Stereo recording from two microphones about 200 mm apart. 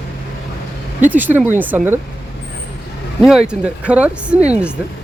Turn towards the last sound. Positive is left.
turn(degrees=-35)  # may be behind; listen again after turning